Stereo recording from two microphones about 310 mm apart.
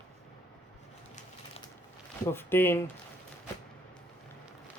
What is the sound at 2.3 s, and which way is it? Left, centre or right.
Speech, centre.